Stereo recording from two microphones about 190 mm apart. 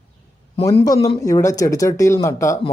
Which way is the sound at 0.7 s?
20° left (ahead or behind).